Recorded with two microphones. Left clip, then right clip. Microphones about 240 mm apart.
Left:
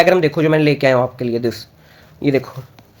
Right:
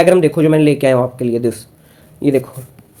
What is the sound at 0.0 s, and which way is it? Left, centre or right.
Speech, centre.